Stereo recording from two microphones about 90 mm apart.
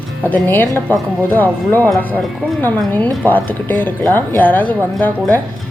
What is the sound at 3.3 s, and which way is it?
Speech, 20° left (ahead or behind).